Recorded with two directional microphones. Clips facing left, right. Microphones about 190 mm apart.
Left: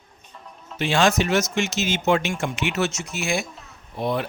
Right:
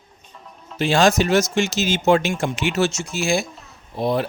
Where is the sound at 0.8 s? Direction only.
35° right (ahead or behind).